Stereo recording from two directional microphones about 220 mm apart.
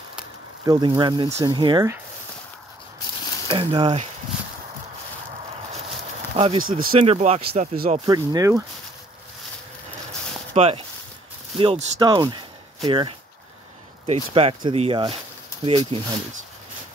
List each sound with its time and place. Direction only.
0.7 s speech: 20° right (ahead or behind)
3.4 s speech: 25° right (ahead or behind)
6.3 s speech: 25° right (ahead or behind)
7.7 s speech: 40° right (ahead or behind)
8.1 s speech: 15° right (ahead or behind)
10.5 s speech: 25° right (ahead or behind)